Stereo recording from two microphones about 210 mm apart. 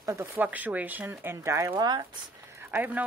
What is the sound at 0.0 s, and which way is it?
A woman's voice, 10° right (ahead or behind).